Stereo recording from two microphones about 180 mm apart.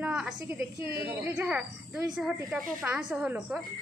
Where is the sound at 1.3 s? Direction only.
5° right (ahead or behind).